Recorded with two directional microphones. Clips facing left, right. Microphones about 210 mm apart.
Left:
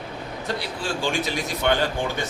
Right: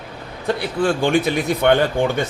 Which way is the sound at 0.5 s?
55° right (ahead or behind).